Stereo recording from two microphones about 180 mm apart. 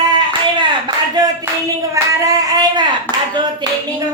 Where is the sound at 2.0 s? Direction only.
15° right (ahead or behind).